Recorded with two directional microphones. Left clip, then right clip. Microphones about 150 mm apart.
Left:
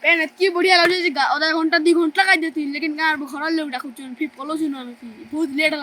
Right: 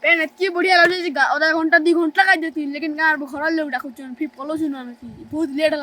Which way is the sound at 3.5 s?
50° right (ahead or behind).